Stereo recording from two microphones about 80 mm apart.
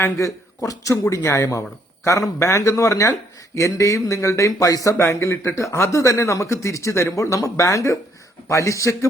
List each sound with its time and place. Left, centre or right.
0.6 s speech: left